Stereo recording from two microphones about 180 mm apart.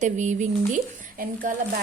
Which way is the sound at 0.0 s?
40° right (ahead or behind).